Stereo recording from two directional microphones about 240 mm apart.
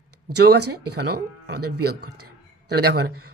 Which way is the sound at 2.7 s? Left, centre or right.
Right.